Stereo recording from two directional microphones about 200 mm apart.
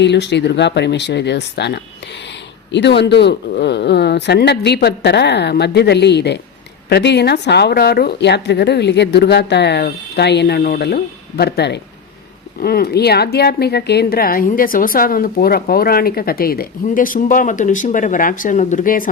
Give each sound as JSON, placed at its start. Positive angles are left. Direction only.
{"t": 0.0, "sound": "speech", "side_deg": 60}